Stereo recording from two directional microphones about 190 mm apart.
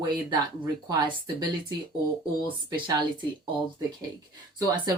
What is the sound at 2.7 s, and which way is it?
Speech, 25° right (ahead or behind).